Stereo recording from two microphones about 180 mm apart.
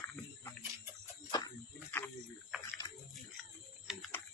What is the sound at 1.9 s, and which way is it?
Wild animals, 10° left (ahead or behind).